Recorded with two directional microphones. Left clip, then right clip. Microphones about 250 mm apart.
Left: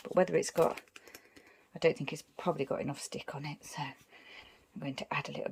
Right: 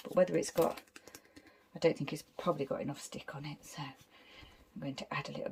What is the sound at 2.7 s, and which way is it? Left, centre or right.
Speech, centre.